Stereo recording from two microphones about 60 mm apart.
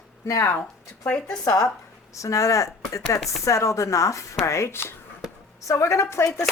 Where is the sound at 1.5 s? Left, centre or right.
Left.